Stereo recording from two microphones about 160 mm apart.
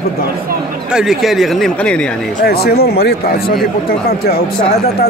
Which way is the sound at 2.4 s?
80° left.